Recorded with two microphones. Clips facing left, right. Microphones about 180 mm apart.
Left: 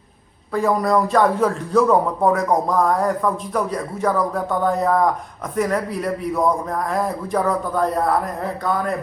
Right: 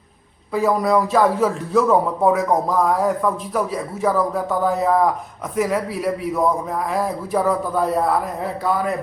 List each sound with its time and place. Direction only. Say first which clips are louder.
0.5 s speech: right 1 dB; 5° right (ahead or behind)